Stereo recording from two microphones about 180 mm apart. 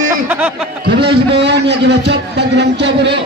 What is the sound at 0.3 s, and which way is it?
Speech, 5° right (ahead or behind).